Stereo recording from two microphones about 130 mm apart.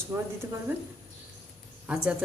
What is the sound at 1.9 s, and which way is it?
Speech, 10° right (ahead or behind).